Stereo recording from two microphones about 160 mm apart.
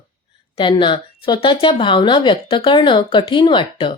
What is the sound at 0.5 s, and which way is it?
Speech, 30° left (ahead or behind).